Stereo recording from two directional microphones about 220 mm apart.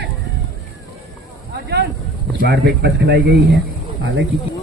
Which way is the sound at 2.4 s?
50° right (ahead or behind).